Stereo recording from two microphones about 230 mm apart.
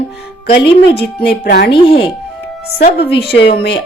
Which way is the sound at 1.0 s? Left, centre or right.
Left.